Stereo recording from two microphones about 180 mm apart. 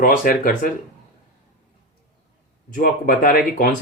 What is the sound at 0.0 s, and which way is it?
Speech, 50° left (ahead or behind).